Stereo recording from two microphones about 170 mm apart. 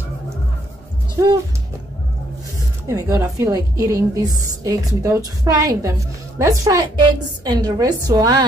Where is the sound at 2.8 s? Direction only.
20° right (ahead or behind).